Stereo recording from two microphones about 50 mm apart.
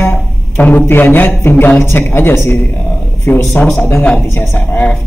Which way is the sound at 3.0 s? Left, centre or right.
Left.